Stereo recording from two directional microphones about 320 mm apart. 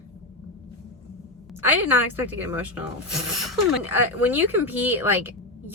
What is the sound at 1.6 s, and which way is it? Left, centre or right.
Speech, centre.